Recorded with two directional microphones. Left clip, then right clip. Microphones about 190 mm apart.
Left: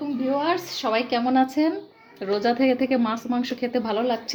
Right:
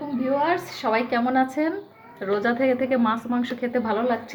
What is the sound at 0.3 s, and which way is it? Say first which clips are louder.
A woman's voice: right 2 dB; 30° left (ahead or behind).